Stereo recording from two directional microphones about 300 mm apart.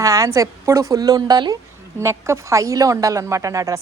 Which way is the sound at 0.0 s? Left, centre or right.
Centre.